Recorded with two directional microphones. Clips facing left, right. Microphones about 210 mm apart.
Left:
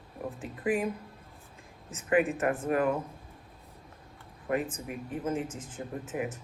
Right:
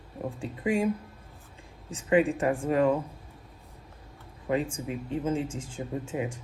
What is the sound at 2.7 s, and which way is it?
Speech, 25° right (ahead or behind).